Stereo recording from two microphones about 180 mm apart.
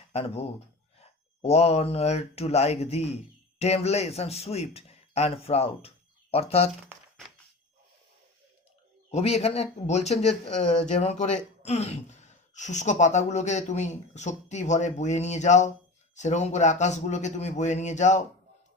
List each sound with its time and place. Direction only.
0.1 s speech: 35° left (ahead or behind)
9.1 s speech: 35° left (ahead or behind)